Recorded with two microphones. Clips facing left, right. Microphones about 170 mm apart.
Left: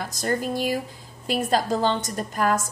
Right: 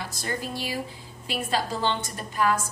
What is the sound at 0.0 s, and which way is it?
A woman's voice, 45° left (ahead or behind).